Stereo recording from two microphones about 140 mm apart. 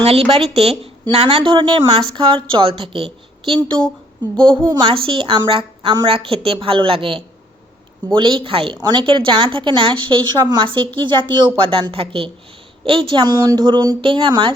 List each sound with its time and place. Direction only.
0.0 s a woman's voice: 45° right (ahead or behind)